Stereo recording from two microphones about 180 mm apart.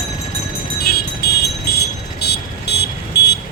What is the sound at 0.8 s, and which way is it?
Music, 60° left (ahead or behind).